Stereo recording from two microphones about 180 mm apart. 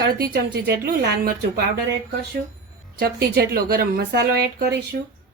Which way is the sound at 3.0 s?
60° right (ahead or behind).